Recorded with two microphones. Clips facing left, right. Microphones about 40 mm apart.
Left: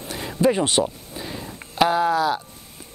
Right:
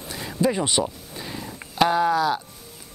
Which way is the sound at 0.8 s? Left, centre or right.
Centre.